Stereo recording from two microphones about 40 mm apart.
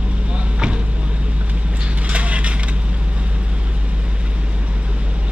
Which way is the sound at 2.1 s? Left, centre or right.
Right.